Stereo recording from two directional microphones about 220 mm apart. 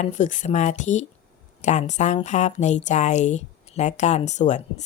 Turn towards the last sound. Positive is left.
turn(degrees=30)  # may be behind; listen again after turning